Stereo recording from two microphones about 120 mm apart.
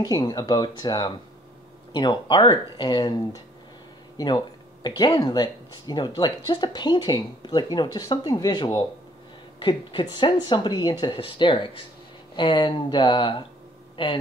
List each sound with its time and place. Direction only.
0.0 s speech: 35° left (ahead or behind)
4.8 s speech: 35° left (ahead or behind)